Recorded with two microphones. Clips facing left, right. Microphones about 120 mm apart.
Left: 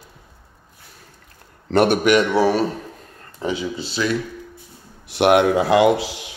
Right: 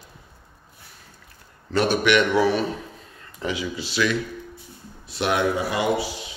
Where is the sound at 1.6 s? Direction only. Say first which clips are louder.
Left 5 dB; 60° left (ahead or behind).